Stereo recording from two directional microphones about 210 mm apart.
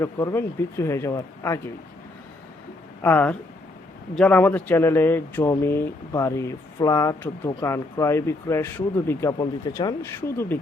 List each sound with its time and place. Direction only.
0.0 s speech: 15° left (ahead or behind)
3.0 s speech: 10° left (ahead or behind)